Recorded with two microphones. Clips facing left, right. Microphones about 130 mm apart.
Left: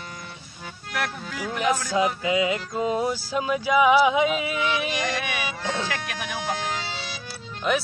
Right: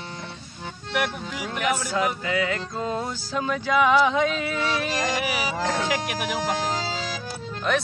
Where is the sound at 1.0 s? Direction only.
15° right (ahead or behind).